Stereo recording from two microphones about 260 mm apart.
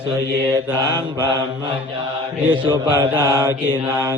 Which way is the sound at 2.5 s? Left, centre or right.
Centre.